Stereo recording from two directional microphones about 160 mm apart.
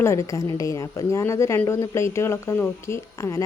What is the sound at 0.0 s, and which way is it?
A woman's voice, 15° left (ahead or behind).